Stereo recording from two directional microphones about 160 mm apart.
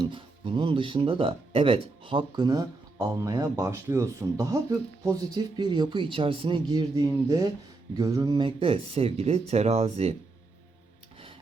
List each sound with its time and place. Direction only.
0.0 s speech: 30° right (ahead or behind)